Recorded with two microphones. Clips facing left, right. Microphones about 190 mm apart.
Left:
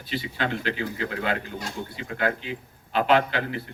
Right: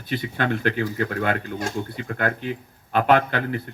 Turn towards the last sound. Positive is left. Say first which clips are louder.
# right 2 dB
turn(degrees=-50)  # may be behind; listen again after turning